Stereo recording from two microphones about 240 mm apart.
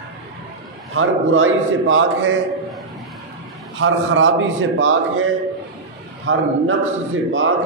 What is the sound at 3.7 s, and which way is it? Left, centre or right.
A man's voice, right.